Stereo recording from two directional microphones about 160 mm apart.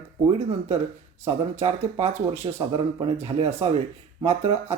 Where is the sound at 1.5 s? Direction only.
40° right (ahead or behind).